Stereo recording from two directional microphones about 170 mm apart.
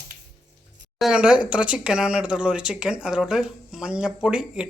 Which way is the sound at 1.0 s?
5° right (ahead or behind).